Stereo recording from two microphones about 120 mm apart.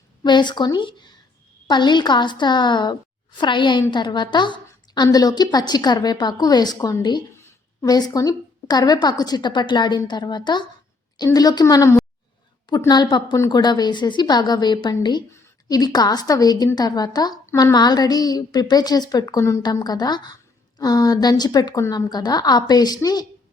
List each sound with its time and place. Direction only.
0.2 s a woman's voice: 40° left (ahead or behind)
12.9 s a woman's voice: 35° left (ahead or behind)
13.3 s a woman's voice: 25° left (ahead or behind)
13.6 s a woman's voice: 35° left (ahead or behind)